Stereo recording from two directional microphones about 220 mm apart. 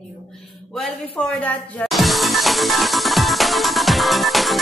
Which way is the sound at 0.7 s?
5° left (ahead or behind).